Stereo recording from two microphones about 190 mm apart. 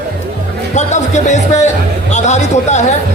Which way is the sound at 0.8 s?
40° left (ahead or behind).